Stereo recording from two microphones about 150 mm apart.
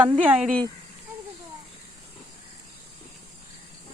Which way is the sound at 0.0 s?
5° right (ahead or behind).